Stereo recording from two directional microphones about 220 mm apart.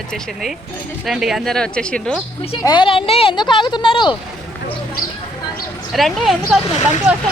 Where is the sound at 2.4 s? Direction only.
25° left (ahead or behind).